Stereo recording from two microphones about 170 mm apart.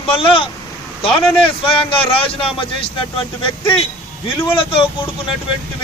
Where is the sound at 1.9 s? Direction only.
30° left (ahead or behind).